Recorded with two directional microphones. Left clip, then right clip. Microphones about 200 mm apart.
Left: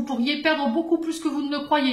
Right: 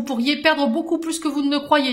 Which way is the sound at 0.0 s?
50° right (ahead or behind).